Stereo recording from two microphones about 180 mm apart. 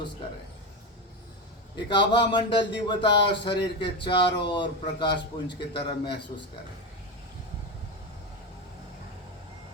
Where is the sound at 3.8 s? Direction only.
25° left (ahead or behind).